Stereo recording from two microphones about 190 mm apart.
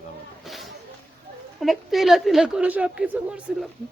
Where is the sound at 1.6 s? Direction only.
Centre (ahead or behind).